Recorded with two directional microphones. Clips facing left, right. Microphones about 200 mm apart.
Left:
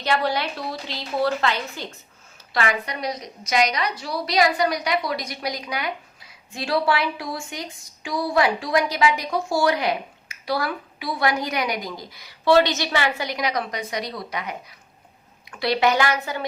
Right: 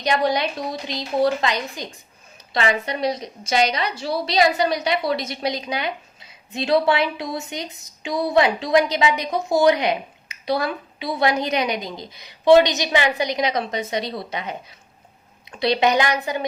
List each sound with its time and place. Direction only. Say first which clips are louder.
0.0 s a woman's voice: right 3 dB; 15° right (ahead or behind)